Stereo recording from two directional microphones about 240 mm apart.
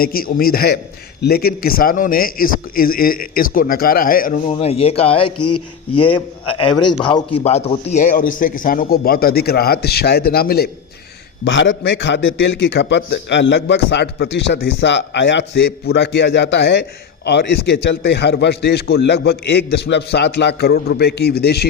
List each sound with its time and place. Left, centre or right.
0.0 s a man's voice: left
4.4 s a man's voice: left
11.4 s a man's voice: left